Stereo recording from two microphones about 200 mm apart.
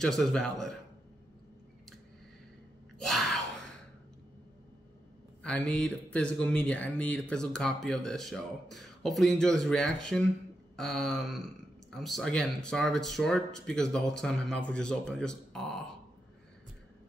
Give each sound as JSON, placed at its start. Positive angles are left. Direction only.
{"t": 0.0, "sound": "speech", "side_deg": 0}
{"t": 3.0, "sound": "a sound", "side_deg": 0}
{"t": 5.4, "sound": "speech", "side_deg": 5}